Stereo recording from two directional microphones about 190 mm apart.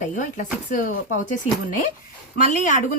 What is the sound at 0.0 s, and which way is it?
Speech, 45° left (ahead or behind).